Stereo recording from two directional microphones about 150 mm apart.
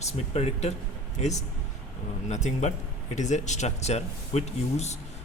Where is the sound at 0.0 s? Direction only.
45° left (ahead or behind).